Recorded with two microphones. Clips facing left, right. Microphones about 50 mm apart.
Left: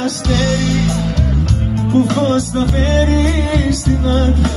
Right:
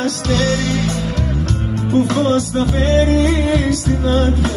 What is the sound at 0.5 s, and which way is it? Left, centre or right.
Music, right.